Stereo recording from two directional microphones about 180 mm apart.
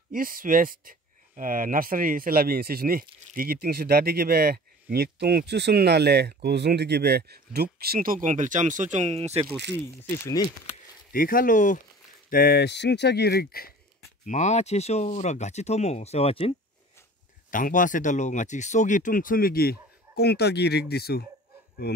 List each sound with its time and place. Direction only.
0.1 s speech: 50° right (ahead or behind); by 9.5 s 35° right (ahead or behind)
10.2 s speech: 20° left (ahead or behind)
11.1 s speech: 50° left (ahead or behind)
12.3 s speech: 55° left (ahead or behind)
14.2 s speech: 40° left (ahead or behind)
17.5 s speech: 50° left (ahead or behind); by 22.0 s 65° left (ahead or behind)